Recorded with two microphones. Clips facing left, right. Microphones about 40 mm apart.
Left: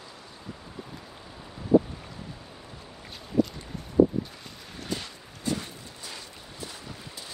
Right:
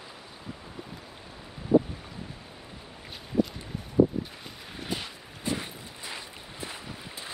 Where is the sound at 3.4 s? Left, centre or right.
Centre.